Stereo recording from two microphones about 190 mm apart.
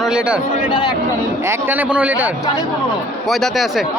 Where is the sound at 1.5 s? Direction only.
10° right (ahead or behind).